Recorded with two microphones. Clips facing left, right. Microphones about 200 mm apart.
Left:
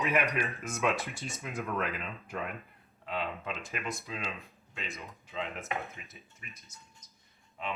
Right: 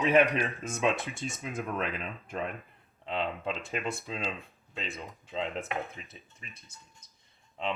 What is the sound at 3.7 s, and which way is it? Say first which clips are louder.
Speech: right 4 dB; 30° right (ahead or behind).